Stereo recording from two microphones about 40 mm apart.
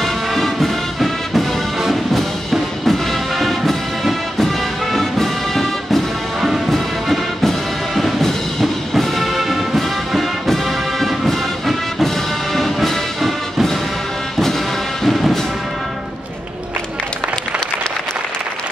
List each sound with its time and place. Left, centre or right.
0.0 s music: centre
15.0 s music: centre